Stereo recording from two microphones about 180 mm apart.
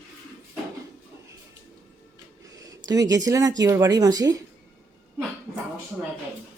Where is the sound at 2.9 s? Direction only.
20° right (ahead or behind).